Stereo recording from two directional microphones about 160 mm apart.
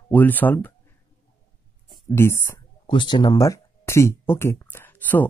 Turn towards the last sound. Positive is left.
turn(degrees=10)  # may be behind; listen again after turning